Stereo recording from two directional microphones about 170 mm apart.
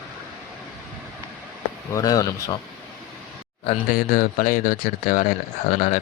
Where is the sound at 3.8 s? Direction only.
60° left (ahead or behind).